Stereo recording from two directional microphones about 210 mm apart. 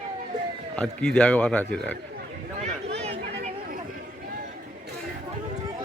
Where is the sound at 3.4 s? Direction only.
35° right (ahead or behind).